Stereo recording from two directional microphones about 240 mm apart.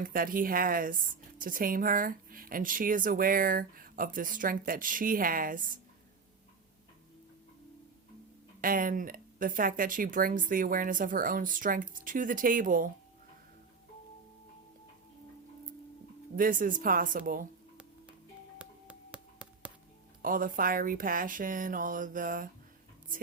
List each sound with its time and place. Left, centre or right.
0.0 s speech: right
8.6 s speech: right
16.3 s speech: right
18.6 s a sound: centre
20.2 s speech: right